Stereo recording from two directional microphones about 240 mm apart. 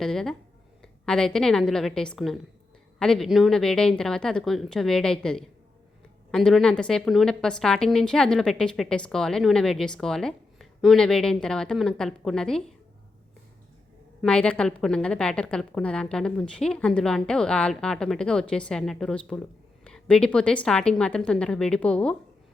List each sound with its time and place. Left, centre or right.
0.0 s a woman's voice: centre
14.2 s a woman's voice: centre